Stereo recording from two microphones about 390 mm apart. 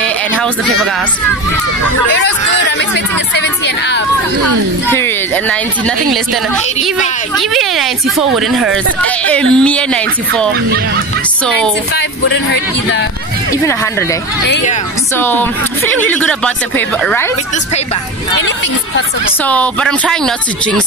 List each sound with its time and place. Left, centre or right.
0.0 s speech: centre
3.6 s speech: left
4.9 s speech: centre
7.3 s speech: centre
13.5 s speech: centre
14.5 s speech: centre
15.1 s speech: centre
19.4 s speech: centre